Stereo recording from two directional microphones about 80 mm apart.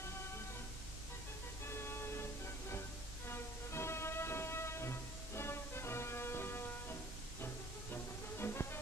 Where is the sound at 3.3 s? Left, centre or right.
Left.